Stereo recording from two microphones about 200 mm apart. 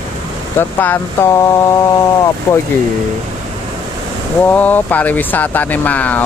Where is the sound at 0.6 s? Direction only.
10° left (ahead or behind).